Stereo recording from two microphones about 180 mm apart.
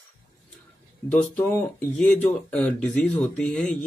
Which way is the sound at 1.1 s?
5° left (ahead or behind).